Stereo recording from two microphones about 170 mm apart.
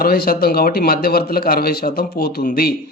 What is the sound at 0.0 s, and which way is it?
Speech, 60° left (ahead or behind).